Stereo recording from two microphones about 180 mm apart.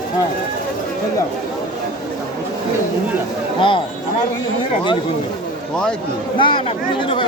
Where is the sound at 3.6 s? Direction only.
25° left (ahead or behind).